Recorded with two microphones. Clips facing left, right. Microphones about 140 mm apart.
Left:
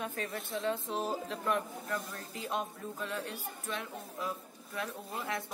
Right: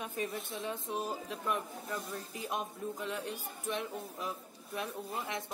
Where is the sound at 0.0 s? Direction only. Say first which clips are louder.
Even; 15° right (ahead or behind).